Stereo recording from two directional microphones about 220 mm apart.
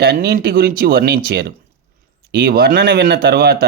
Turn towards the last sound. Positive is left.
turn(degrees=-45)  # may be behind; listen again after turning